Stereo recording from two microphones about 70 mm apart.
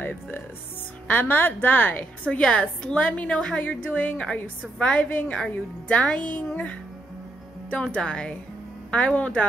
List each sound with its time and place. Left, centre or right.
0.0 s a woman's voice: left
2.3 s a woman's voice: centre
3.6 s a woman's voice: centre
4.3 s a woman's voice: centre